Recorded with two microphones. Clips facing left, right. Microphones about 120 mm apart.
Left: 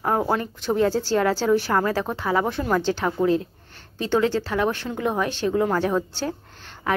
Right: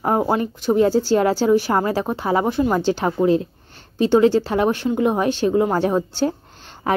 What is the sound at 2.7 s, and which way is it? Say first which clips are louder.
A woman's voice: right 3 dB; 20° right (ahead or behind).